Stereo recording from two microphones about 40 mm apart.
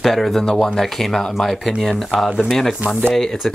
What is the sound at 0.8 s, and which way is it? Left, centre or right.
Speech, centre.